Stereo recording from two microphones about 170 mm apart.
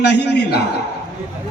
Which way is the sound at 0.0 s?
80° left.